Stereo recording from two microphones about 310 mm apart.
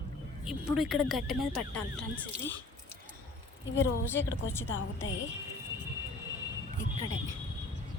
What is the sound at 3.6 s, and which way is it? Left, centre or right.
Speech, left.